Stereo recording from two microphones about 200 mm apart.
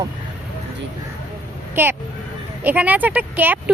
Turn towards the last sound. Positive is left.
turn(degrees=-10)  # may be behind; listen again after turning